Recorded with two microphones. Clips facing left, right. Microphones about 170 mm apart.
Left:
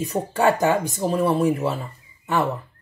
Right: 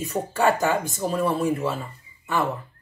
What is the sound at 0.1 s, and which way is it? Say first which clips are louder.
Speech: left 1 dB; 20° left (ahead or behind).